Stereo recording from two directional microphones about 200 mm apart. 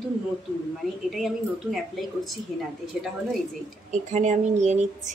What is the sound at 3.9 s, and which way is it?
Speech, 35° right (ahead or behind).